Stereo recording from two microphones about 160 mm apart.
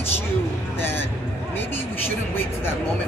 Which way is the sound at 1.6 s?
15° left (ahead or behind).